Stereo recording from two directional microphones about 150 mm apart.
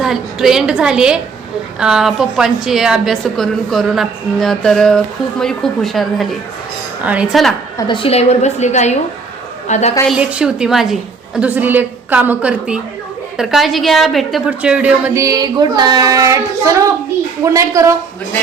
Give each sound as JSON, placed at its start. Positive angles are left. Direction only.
{"t": 0.0, "sound": "a woman's voice", "side_deg": 0}
{"t": 7.8, "sound": "a woman's voice", "side_deg": 35}
{"t": 10.1, "sound": "a woman's voice", "side_deg": -10}
{"t": 15.2, "sound": "child singing", "side_deg": -25}
{"t": 17.4, "sound": "child singing", "side_deg": -20}